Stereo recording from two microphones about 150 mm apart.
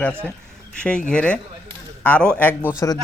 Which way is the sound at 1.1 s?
5° left (ahead or behind).